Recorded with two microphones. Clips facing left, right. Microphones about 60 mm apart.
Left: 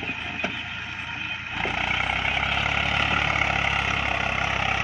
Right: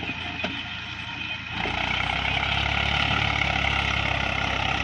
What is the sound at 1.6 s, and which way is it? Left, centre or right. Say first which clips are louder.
Vehicle: left 1 dB; centre.